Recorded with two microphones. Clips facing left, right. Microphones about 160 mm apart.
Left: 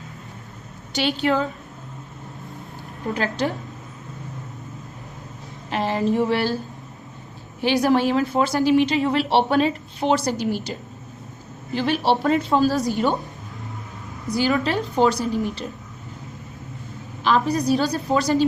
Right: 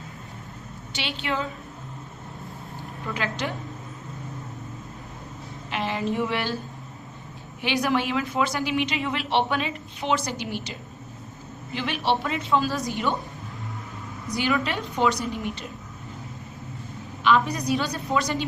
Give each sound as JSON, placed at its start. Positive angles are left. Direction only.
{"t": 0.9, "sound": "a woman's voice", "side_deg": 40}
{"t": 3.2, "sound": "a woman's voice", "side_deg": 40}
{"t": 5.7, "sound": "a woman's voice", "side_deg": 40}
{"t": 7.6, "sound": "a woman's voice", "side_deg": 35}
{"t": 14.3, "sound": "a woman's voice", "side_deg": 35}
{"t": 17.2, "sound": "a woman's voice", "side_deg": 35}